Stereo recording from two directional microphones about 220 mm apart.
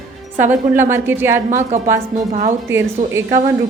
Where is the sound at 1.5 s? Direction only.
35° right (ahead or behind).